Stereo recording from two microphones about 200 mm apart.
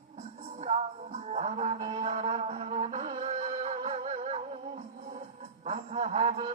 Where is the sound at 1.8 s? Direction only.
30° right (ahead or behind).